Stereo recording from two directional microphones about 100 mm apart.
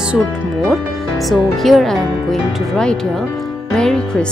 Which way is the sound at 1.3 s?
Centre (ahead or behind).